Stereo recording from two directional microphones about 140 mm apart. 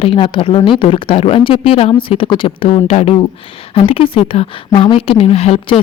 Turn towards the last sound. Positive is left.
turn(degrees=45)  # may be behind; listen again after turning